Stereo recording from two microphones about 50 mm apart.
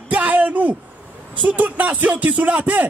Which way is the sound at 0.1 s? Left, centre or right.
Right.